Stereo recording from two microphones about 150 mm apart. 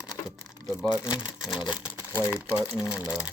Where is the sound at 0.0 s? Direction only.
25° left (ahead or behind).